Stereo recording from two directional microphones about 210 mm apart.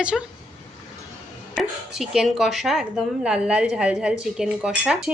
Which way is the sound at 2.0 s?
Centre (ahead or behind).